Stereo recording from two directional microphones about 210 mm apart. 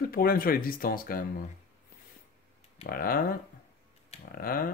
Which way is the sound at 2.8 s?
45° left (ahead or behind).